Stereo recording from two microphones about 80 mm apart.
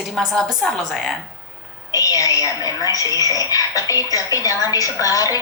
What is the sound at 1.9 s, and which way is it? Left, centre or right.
A woman's voice, left.